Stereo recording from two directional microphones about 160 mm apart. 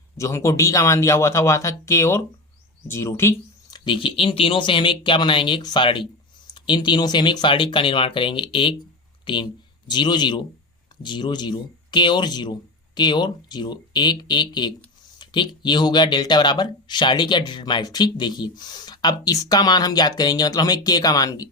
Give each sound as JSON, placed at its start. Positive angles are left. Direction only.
{"t": 0.2, "sound": "speech", "side_deg": 20}
{"t": 3.8, "sound": "speech", "side_deg": 30}